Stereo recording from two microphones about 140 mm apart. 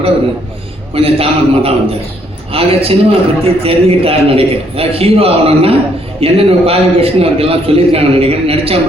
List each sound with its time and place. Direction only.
0.9 s a man's voice: 45° right (ahead or behind)